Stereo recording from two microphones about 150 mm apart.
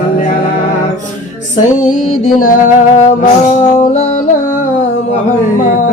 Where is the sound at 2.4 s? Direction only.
60° left (ahead or behind).